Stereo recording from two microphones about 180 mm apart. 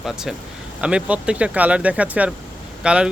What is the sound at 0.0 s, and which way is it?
Speech, centre (ahead or behind).